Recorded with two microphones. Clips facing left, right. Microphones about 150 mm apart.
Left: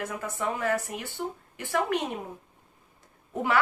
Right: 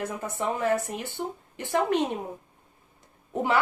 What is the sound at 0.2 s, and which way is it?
Speech, 25° right (ahead or behind).